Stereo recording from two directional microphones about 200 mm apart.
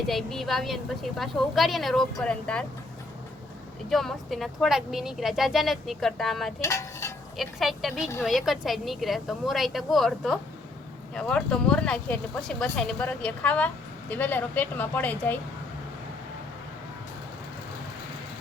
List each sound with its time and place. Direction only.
0.1 s speech: centre (ahead or behind)
3.8 s speech: centre (ahead or behind)
6.6 s dishes: 15° left (ahead or behind)
7.3 s speech: centre (ahead or behind)